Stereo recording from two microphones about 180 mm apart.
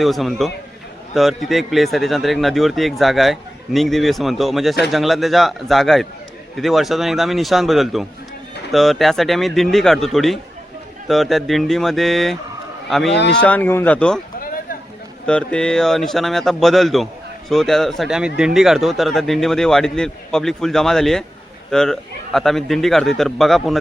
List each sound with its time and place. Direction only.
0.0 s speech: centre (ahead or behind)
13.1 s speech: 75° left (ahead or behind)
13.4 s speech: 10° left (ahead or behind)
15.3 s speech: 5° left (ahead or behind)